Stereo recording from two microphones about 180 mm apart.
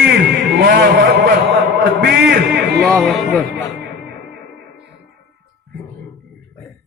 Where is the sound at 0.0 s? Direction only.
70° right (ahead or behind).